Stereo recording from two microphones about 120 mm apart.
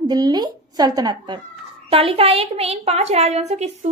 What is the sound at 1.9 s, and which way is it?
A child's voice, 50° right (ahead or behind).